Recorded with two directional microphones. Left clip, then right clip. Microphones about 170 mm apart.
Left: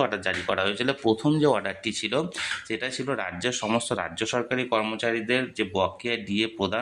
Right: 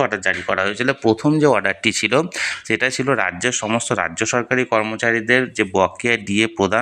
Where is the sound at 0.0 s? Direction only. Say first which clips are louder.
Right 7 dB; 20° right (ahead or behind).